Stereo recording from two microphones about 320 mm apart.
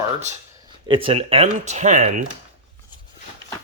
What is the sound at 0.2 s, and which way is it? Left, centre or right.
Speech, centre.